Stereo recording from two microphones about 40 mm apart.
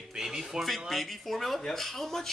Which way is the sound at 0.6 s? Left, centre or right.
Centre.